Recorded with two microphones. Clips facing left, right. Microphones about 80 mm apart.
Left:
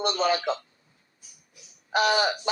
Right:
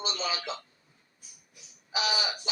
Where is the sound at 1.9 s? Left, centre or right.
Left.